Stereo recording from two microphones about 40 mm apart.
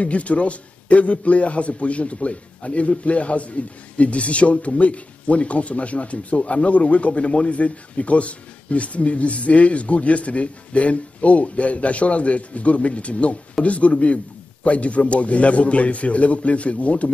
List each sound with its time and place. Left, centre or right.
0.0 s a man's voice: left